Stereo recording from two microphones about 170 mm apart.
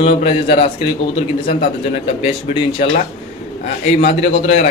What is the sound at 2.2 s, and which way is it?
Speech, 30° left (ahead or behind).